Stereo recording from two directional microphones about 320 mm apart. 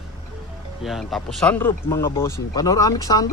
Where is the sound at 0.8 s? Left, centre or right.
Centre.